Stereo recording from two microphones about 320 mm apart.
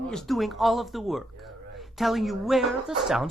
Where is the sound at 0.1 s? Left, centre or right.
Centre.